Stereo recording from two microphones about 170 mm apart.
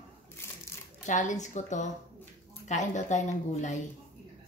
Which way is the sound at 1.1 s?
45° left (ahead or behind).